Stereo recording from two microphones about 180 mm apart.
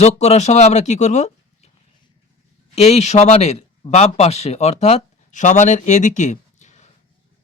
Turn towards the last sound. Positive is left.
turn(degrees=40)  # may be behind; listen again after turning